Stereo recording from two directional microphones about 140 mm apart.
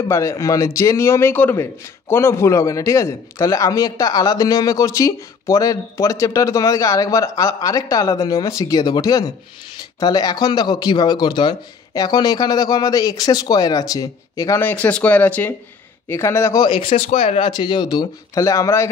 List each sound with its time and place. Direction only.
0.0 s a man's voice: 20° left (ahead or behind)
16.6 s speech: 40° left (ahead or behind); by 18.9 s 20° left (ahead or behind)